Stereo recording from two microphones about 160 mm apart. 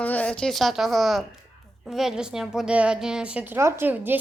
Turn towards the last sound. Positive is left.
turn(degrees=-10)  # may be behind; listen again after turning